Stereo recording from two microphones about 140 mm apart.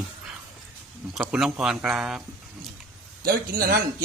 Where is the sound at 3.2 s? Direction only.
90° right.